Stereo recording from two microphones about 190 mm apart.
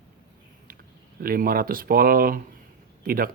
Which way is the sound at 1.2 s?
50° right (ahead or behind).